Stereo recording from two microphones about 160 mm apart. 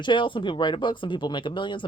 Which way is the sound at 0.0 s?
30° left (ahead or behind).